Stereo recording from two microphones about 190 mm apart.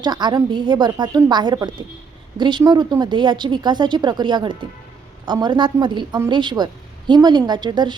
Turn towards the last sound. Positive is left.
turn(degrees=-25)  # may be behind; listen again after turning